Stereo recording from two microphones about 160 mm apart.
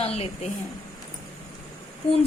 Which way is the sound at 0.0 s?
40° left (ahead or behind).